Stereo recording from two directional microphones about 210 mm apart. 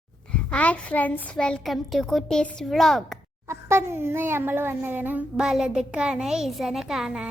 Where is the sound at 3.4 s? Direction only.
10° right (ahead or behind).